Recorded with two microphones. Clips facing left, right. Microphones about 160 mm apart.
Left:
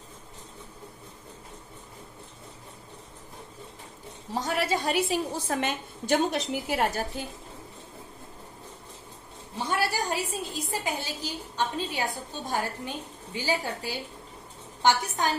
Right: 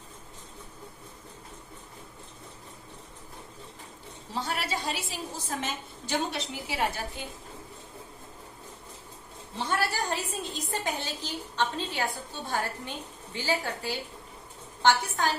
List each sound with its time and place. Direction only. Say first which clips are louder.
4.3 s a woman's voice: left 5 dB; 45° left (ahead or behind)
9.6 s a woman's voice: left 1 dB; 10° left (ahead or behind)